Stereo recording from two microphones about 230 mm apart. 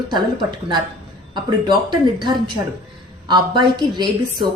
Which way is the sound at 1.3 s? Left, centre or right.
Centre.